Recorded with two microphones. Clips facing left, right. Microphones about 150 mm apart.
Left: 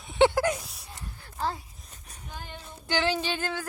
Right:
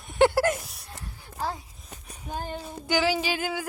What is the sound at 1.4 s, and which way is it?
Speech, 15° right (ahead or behind).